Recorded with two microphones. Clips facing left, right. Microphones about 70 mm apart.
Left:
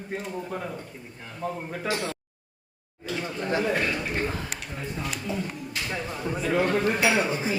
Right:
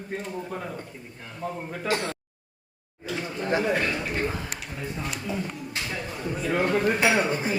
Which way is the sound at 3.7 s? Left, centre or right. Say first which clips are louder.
Right 1 dB; centre.